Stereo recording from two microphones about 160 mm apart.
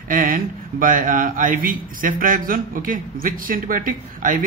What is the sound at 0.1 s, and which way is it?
Mantra, 60° right (ahead or behind).